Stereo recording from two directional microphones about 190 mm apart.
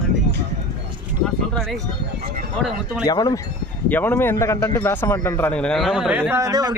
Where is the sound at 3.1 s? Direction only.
20° left (ahead or behind).